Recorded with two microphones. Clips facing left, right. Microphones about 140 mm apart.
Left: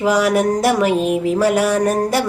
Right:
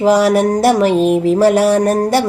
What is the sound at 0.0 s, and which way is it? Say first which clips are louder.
Speech: right 4 dB; 30° right (ahead or behind).